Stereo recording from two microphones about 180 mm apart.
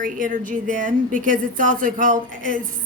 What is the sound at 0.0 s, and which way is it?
A woman's voice, 50° right (ahead or behind).